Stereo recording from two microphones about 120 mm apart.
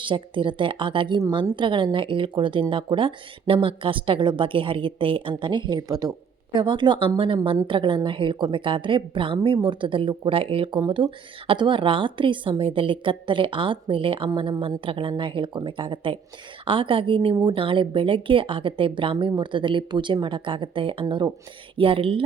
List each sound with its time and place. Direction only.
0.0 s a woman's voice: 45° right (ahead or behind)